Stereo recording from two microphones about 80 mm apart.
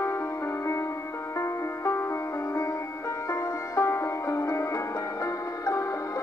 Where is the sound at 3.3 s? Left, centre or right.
Left.